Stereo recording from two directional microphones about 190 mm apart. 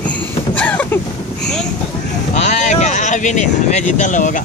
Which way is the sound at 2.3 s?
40° left (ahead or behind).